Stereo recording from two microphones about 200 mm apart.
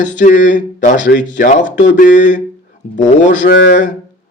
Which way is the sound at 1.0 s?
60° left (ahead or behind).